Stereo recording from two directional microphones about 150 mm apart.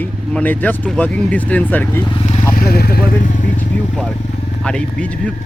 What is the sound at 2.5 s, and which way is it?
Speech, 85° left.